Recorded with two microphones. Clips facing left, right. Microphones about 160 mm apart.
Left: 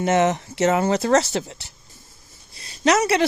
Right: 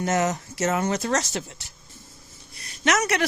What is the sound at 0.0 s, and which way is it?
A woman's voice, 25° left (ahead or behind).